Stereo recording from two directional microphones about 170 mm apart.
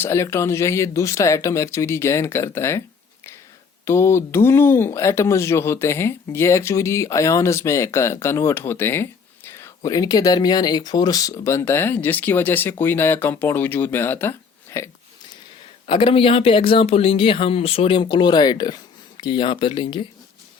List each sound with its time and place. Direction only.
0.0 s speech: 15° left (ahead or behind)
3.8 s speech: 15° left (ahead or behind)
15.9 s speech: 30° left (ahead or behind)